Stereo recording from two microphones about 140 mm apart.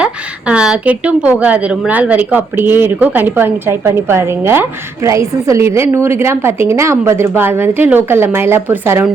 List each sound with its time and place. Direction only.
0.0 s a woman's voice: 10° right (ahead or behind)